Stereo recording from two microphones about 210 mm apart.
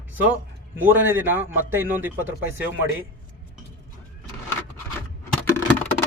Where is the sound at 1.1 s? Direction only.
10° right (ahead or behind).